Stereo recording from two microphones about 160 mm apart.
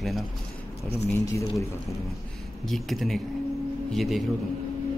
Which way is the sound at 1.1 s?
20° left (ahead or behind).